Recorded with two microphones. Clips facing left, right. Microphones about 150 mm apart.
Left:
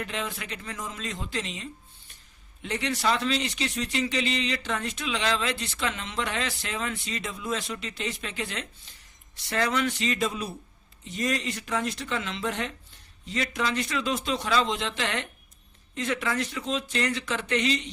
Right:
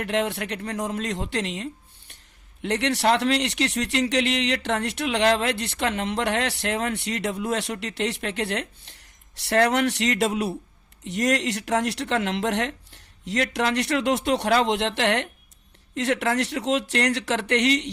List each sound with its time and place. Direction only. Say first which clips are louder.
0.0 s speech: right 8 dB; 70° right (ahead or behind)